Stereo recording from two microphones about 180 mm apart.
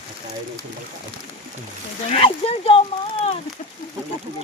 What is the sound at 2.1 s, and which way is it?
Speech, 30° left (ahead or behind).